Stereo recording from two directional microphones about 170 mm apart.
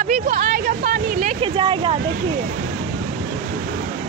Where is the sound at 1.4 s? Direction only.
30° right (ahead or behind).